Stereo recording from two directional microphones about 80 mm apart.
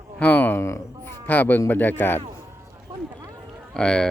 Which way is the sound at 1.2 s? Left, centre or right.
Left.